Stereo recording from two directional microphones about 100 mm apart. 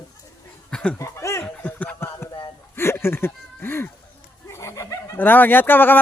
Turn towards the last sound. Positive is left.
turn(degrees=20)  # may be behind; listen again after turning